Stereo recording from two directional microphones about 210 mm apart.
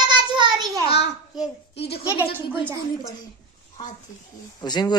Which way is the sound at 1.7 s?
50° left (ahead or behind).